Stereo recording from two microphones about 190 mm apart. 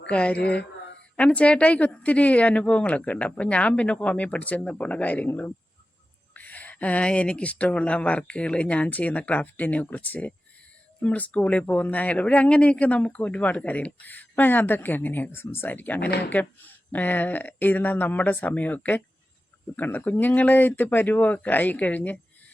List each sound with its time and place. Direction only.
0.1 s speech: 5° left (ahead or behind)
16.0 s speech: 60° left (ahead or behind)
16.3 s speech: 10° left (ahead or behind)